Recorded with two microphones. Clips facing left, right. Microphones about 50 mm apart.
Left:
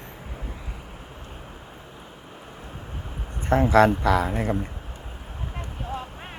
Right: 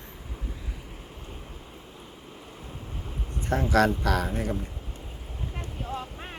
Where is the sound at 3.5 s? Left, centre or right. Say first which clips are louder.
Left 6 dB; left.